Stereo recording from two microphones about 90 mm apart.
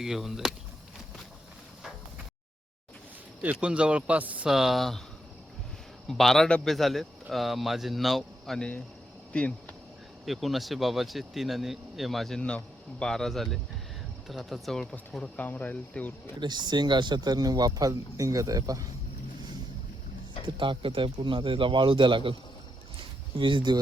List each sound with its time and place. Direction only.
0.0 s a man's voice: 5° right (ahead or behind)
3.4 s speech: 15° right (ahead or behind)
4.4 s a man's voice: 5° right (ahead or behind)
6.1 s a man's voice: 5° left (ahead or behind)
10.2 s a man's voice: centre (ahead or behind)
15.4 s speech: 20° left (ahead or behind)
16.4 s speech: 55° right (ahead or behind); by 18.9 s 40° right (ahead or behind)
20.6 s speech: 70° right (ahead or behind)
23.4 s speech: 65° right (ahead or behind)